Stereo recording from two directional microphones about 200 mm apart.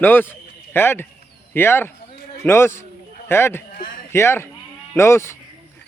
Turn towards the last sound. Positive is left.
turn(degrees=15)  # may be behind; listen again after turning